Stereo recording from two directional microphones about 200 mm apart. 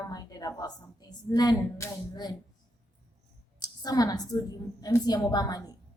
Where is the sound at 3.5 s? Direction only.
20° left (ahead or behind).